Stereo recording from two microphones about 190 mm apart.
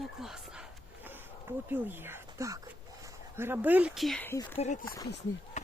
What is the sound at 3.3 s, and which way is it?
Speech, 10° right (ahead or behind).